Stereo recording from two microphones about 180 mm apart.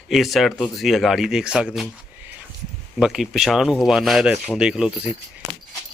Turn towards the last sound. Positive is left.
turn(degrees=-5)  # may be behind; listen again after turning